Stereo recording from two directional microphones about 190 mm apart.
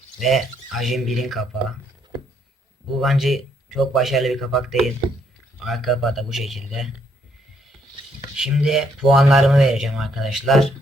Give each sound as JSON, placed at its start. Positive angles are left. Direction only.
{"t": 0.2, "sound": "speech", "side_deg": 0}
{"t": 2.9, "sound": "speech", "side_deg": 0}
{"t": 8.4, "sound": "speech", "side_deg": -5}